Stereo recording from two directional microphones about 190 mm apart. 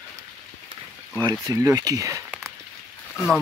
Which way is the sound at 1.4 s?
15° right (ahead or behind).